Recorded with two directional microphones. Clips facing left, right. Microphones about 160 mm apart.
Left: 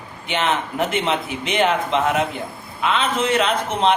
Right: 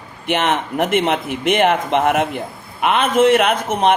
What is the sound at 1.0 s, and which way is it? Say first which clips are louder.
A man's voice: right 5 dB; 55° right (ahead or behind).